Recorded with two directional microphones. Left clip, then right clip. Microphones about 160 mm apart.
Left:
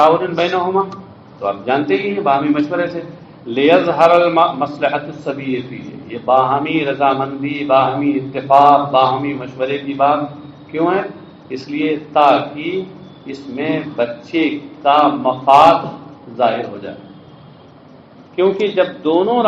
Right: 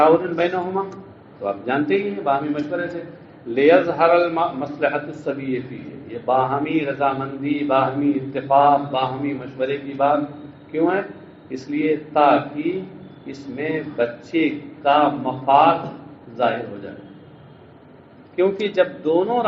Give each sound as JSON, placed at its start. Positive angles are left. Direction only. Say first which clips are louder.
{"t": 0.0, "sound": "mantra", "louder": "left 3 dB", "side_deg": 30}
{"t": 10.8, "sound": "a man's voice", "louder": "left 4 dB", "side_deg": 35}
{"t": 11.8, "sound": "mantra", "louder": "left 4 dB", "side_deg": 35}
{"t": 18.3, "sound": "mantra", "louder": "left 4 dB", "side_deg": 30}